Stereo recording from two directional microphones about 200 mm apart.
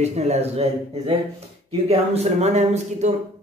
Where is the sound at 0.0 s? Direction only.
35° right (ahead or behind).